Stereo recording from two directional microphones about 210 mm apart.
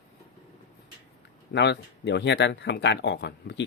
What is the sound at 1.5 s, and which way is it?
Speech, 55° left (ahead or behind).